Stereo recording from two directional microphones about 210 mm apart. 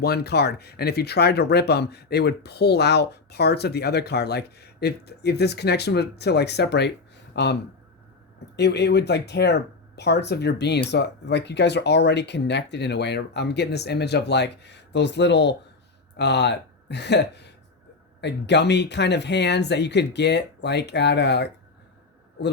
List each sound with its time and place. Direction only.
0.0 s speech: 50° left (ahead or behind)
8.5 s speech: 50° left (ahead or behind)